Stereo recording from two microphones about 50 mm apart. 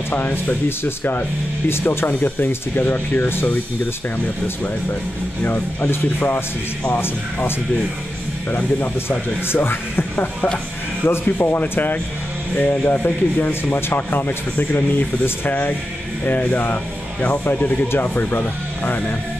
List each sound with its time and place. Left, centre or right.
0.1 s speech: left
5.4 s speech: left
9.5 s speech: left
11.4 s speech: left
12.5 s speech: left
14.6 s speech: left
15.2 s speech: left
17.5 s speech: left